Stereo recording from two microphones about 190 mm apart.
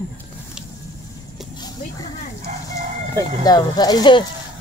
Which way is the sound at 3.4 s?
20° left (ahead or behind).